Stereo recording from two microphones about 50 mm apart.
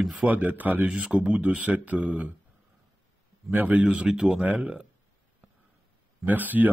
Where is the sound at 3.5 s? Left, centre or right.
Right.